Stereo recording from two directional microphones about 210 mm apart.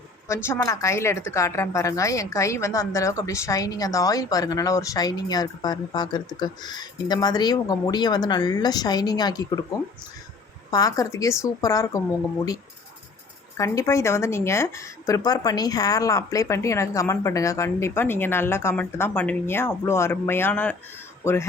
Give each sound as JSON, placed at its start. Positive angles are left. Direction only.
{"t": 0.4, "sound": "a woman's voice", "side_deg": 15}
{"t": 10.7, "sound": "a woman's voice", "side_deg": 15}
{"t": 13.6, "sound": "a woman's voice", "side_deg": 15}